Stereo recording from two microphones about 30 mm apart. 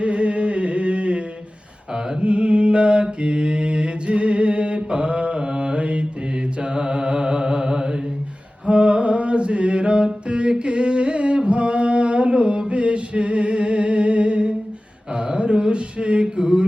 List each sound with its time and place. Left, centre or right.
0.0 s music: right
1.9 s mantra: right
2.2 s mantra: right
6.6 s mantra: right
8.6 s a sound: right
15.1 s mantra: right